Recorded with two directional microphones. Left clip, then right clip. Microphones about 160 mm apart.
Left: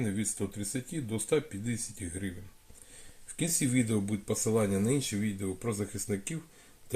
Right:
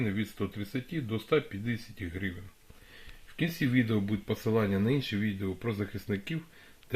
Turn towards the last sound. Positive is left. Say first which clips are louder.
# even
turn(degrees=-35)  # may be behind; listen again after turning